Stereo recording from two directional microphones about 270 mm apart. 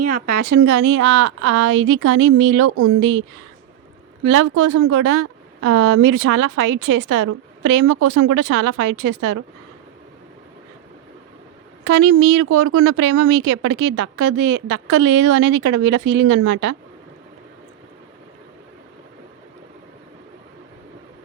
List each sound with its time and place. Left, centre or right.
0.4 s a woman's voice: right
3.0 s a woman's voice: right
11.9 s a woman's voice: right